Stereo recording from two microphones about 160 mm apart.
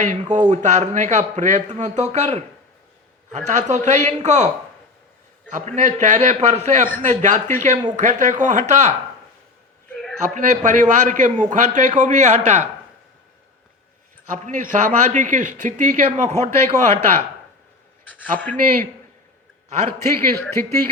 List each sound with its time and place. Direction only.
0.0 s a man's voice: 45° right (ahead or behind)
10.3 s a man's voice: 50° right (ahead or behind)
14.3 s a man's voice: 50° right (ahead or behind)
18.3 s speech: 10° left (ahead or behind)
20.0 s speech: 15° left (ahead or behind)